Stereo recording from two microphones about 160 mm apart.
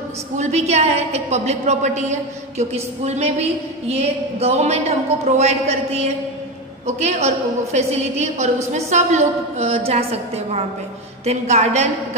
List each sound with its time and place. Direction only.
0.4 s a woman's voice: 45° right (ahead or behind)